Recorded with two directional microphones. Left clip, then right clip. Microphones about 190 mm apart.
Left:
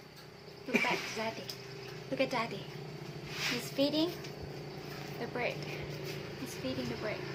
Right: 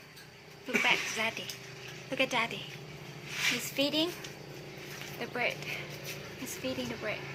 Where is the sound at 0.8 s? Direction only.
15° right (ahead or behind).